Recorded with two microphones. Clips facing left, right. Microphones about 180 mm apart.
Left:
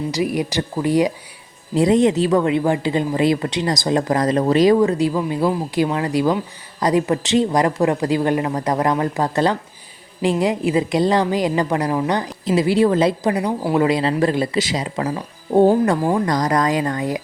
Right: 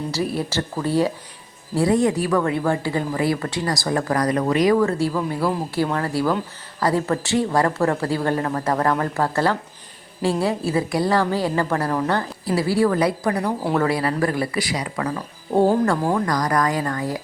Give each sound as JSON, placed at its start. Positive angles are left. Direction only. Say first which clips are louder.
{"t": 0.1, "sound": "a woman's voice", "louder": "left 3 dB", "side_deg": 15}